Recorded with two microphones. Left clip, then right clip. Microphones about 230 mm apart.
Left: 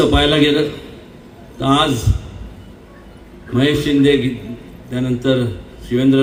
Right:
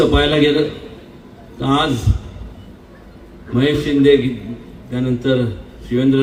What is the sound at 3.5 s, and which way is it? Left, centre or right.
A man's voice, left.